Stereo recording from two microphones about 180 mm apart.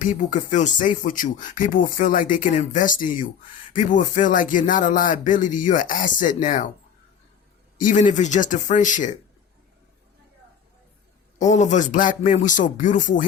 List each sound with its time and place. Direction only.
0.0 s speech: 45° left (ahead or behind)
7.8 s speech: 45° left (ahead or behind)
11.3 s speech: 40° left (ahead or behind)